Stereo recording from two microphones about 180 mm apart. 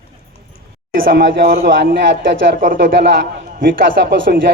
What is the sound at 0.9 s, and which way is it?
Speech, 50° right (ahead or behind).